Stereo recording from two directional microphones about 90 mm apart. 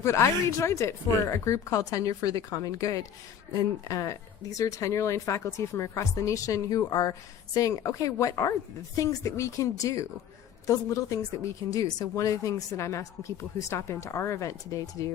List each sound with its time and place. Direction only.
0.0 s speech: 35° left (ahead or behind)